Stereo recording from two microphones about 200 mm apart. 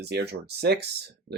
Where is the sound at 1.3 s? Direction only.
30° right (ahead or behind).